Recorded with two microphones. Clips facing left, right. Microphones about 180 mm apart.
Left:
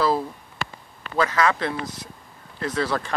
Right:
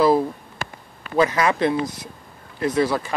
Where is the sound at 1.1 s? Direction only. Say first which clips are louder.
Right 3 dB; 20° right (ahead or behind).